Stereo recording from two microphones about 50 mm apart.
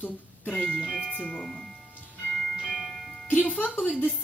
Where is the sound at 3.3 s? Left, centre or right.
Left.